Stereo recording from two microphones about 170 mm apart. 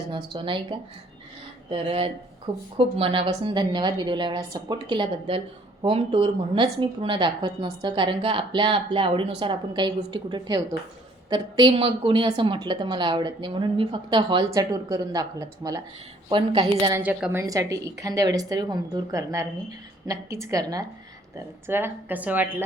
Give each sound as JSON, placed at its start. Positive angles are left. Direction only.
{"t": 0.1, "sound": "a woman's voice", "side_deg": -30}
{"t": 16.9, "sound": "a woman's voice", "side_deg": -10}
{"t": 17.4, "sound": "a woman's voice", "side_deg": -20}